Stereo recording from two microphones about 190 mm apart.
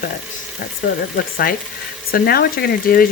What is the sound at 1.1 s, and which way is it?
Speech, 50° left (ahead or behind).